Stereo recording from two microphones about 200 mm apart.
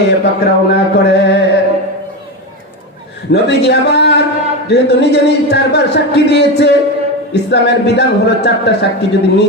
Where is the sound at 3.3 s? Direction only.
60° left (ahead or behind).